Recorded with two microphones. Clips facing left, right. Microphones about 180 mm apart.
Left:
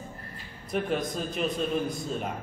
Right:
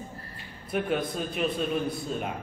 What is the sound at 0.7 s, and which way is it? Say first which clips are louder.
A man's voice: right 1 dB; 5° right (ahead or behind).